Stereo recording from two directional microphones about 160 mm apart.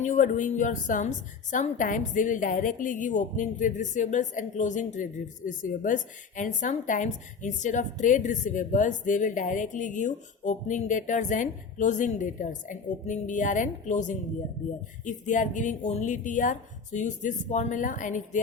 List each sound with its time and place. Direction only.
0.0 s a woman's voice: 55° left (ahead or behind)